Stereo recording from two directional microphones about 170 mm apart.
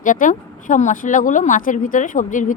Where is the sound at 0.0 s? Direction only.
50° left (ahead or behind).